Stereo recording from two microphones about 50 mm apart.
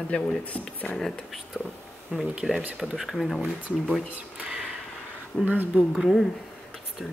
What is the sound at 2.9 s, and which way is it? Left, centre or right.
Speech, centre.